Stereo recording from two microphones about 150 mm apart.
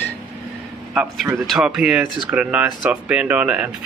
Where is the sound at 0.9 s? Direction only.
5° right (ahead or behind).